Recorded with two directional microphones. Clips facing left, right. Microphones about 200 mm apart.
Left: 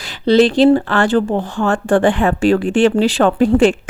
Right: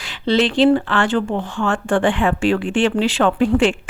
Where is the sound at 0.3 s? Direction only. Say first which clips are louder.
Left 4 dB; 40° left (ahead or behind).